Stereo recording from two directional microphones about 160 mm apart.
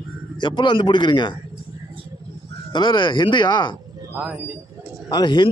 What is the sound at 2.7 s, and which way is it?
A man's voice, 30° left (ahead or behind).